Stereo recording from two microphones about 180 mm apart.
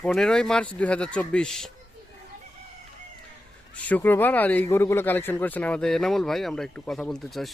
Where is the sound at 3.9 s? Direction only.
10° left (ahead or behind).